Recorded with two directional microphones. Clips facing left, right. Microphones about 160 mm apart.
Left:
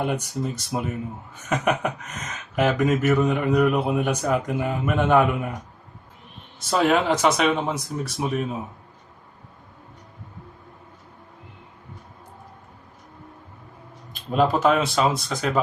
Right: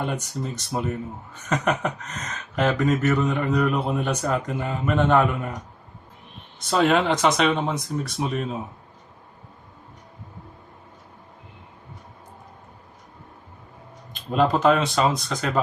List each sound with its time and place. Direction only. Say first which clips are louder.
0.0 s speech: left 3 dB; 10° left (ahead or behind)
6.7 s speech: even; 5° left (ahead or behind)
14.3 s speech: even; 5° left (ahead or behind)